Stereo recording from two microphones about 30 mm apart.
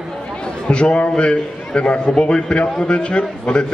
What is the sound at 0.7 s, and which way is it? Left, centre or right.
A man's voice, left.